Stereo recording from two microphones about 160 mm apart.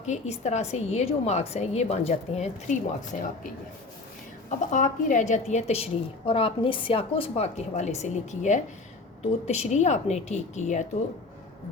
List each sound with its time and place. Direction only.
0.0 s a woman's voice: 45° left (ahead or behind)
4.4 s a woman's voice: 50° left (ahead or behind)